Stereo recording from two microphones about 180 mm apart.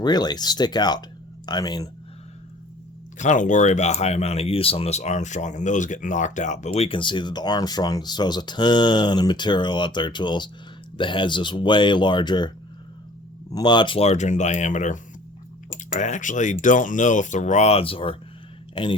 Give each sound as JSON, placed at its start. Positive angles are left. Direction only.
{"t": 0.0, "sound": "speech", "side_deg": 20}
{"t": 3.2, "sound": "speech", "side_deg": 45}
{"t": 13.5, "sound": "speech", "side_deg": 25}